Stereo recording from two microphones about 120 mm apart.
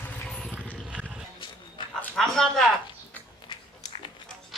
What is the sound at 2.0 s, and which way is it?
Speech, 5° left (ahead or behind).